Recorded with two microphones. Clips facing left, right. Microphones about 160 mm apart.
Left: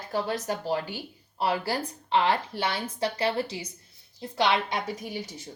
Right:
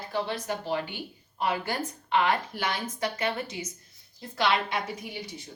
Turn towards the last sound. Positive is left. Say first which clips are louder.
# left 3 dB
turn(degrees=40)  # may be behind; listen again after turning